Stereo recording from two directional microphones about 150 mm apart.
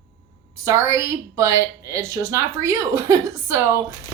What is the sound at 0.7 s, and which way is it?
A woman's voice, 20° right (ahead or behind).